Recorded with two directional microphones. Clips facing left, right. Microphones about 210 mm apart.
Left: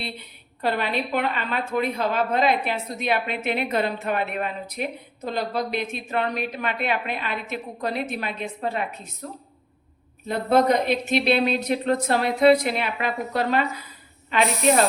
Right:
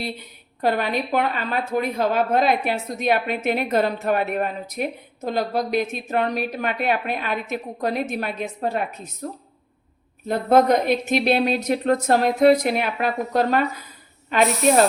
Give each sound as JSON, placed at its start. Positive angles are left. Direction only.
{"t": 0.6, "sound": "a woman's voice", "side_deg": -45}
{"t": 10.2, "sound": "a woman's voice", "side_deg": -50}